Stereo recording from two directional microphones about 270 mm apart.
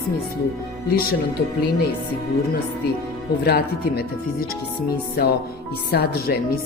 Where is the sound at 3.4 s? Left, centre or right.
Left.